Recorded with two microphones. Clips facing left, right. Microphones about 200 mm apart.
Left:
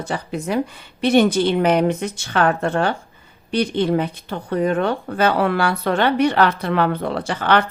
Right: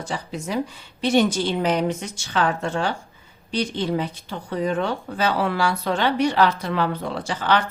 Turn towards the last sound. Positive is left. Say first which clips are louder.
# left 4 dB
turn(degrees=60)  # may be behind; listen again after turning